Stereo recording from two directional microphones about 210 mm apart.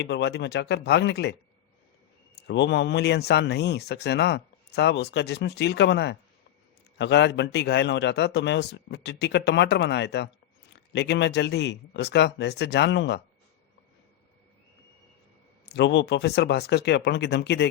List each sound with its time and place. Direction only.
0.0 s a man's voice: 55° left (ahead or behind)
15.7 s speech: 55° left (ahead or behind)